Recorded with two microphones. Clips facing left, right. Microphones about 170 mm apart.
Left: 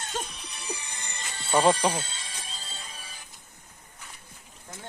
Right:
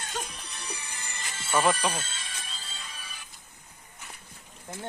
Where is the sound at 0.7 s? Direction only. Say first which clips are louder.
Left 5 dB; 20° left (ahead or behind).